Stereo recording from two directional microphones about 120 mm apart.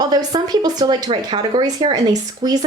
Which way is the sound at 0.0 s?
35° right (ahead or behind).